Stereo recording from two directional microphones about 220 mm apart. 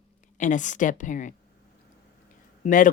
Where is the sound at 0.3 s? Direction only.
35° left (ahead or behind).